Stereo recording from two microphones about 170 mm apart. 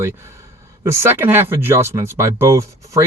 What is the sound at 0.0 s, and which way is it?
Speech, 15° right (ahead or behind).